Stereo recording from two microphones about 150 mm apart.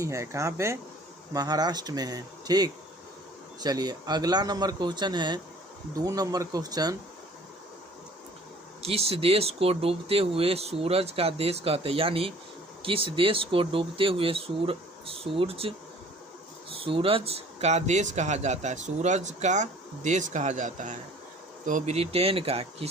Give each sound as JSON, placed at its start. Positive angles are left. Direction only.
{"t": 0.0, "sound": "speech", "side_deg": -20}
{"t": 8.8, "sound": "speech", "side_deg": -40}
{"t": 16.7, "sound": "speech", "side_deg": -35}
{"t": 21.9, "sound": "speech", "side_deg": -40}